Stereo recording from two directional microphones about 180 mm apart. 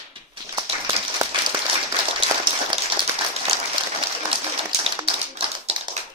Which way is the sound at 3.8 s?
25° right (ahead or behind).